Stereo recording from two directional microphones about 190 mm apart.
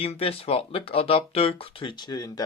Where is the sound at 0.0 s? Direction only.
30° left (ahead or behind).